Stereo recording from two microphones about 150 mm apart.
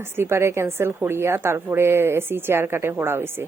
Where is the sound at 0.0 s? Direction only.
15° right (ahead or behind).